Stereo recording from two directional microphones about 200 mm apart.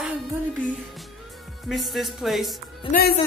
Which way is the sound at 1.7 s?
Centre (ahead or behind).